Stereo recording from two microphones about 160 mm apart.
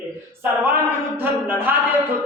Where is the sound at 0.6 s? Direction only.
15° right (ahead or behind).